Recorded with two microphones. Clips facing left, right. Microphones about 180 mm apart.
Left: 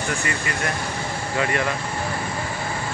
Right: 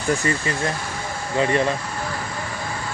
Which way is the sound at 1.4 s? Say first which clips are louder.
Right 4 dB; 30° right (ahead or behind).